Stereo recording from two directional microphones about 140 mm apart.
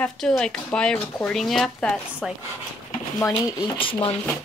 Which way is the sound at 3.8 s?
40° left (ahead or behind).